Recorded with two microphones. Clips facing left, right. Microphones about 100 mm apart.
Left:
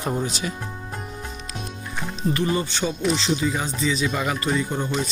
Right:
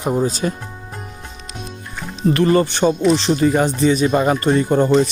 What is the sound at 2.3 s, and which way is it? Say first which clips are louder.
Speech: right 10 dB; 75° right (ahead or behind).